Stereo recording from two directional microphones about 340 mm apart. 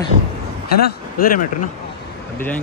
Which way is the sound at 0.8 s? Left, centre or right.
Left.